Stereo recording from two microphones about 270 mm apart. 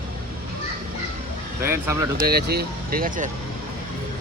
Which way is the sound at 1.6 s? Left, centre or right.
Centre.